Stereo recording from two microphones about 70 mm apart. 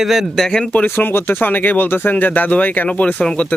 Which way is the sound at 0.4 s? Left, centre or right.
Centre.